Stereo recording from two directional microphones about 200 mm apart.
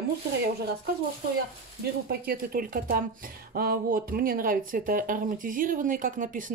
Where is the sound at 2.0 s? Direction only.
45° right (ahead or behind).